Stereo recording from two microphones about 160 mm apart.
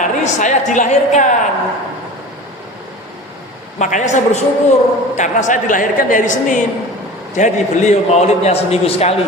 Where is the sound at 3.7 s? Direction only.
50° left (ahead or behind).